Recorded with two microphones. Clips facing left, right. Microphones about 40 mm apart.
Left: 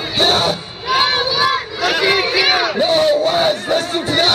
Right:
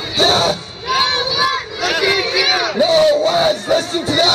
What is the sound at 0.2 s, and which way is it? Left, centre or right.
Crowd, centre.